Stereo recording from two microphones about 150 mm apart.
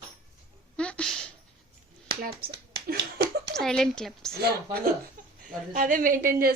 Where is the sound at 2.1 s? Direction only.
85° right.